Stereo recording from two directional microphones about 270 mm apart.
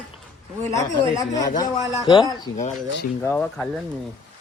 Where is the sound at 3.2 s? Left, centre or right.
Centre.